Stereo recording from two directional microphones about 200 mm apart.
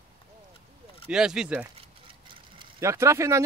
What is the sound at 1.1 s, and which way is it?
Speech, 5° right (ahead or behind).